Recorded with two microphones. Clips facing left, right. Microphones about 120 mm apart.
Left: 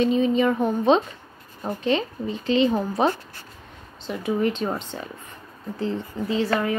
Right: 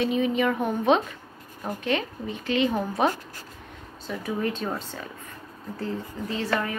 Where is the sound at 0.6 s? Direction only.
10° right (ahead or behind).